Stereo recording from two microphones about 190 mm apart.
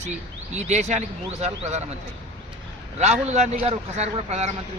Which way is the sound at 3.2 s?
35° right (ahead or behind).